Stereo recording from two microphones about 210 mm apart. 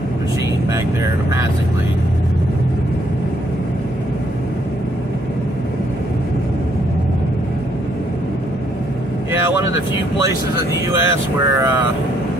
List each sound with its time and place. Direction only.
11.0 s speech: 10° right (ahead or behind)